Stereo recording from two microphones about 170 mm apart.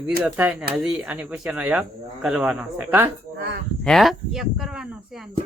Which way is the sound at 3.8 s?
Centre (ahead or behind).